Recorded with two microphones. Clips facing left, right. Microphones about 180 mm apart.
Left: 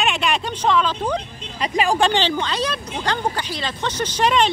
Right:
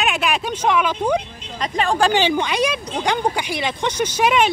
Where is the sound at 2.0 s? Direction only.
10° right (ahead or behind).